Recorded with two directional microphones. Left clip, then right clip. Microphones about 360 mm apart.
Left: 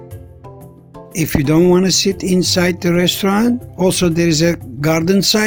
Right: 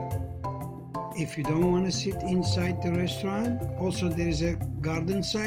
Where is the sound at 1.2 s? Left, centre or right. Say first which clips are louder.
Left 16 dB; left.